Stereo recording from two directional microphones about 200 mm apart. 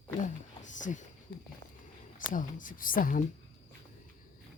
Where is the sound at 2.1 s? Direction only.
40° left (ahead or behind).